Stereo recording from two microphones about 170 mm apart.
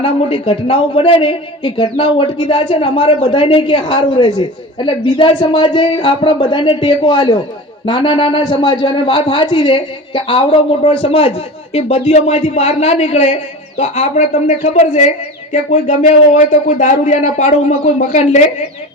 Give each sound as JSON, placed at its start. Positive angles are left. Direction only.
{"t": 0.0, "sound": "a man's voice", "side_deg": 35}